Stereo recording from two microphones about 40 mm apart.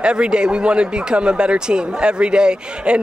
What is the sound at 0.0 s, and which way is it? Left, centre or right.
Speech, right.